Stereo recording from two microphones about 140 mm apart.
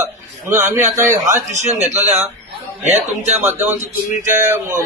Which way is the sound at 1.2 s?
60° right (ahead or behind).